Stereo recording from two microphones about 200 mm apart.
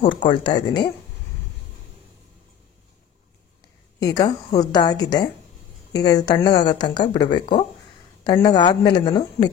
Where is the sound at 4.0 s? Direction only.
20° left (ahead or behind).